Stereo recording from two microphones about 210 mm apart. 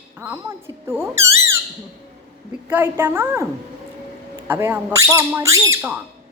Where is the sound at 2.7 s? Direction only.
10° right (ahead or behind).